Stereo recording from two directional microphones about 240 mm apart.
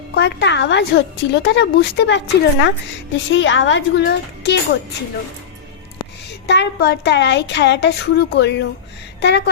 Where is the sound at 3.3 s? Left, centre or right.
Left.